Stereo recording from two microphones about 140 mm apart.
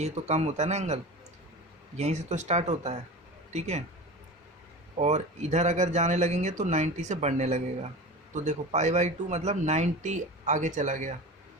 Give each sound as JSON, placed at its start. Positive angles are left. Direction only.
{"t": 0.0, "sound": "speech", "side_deg": -50}
{"t": 2.0, "sound": "speech", "side_deg": -55}
{"t": 4.9, "sound": "a man's voice", "side_deg": -55}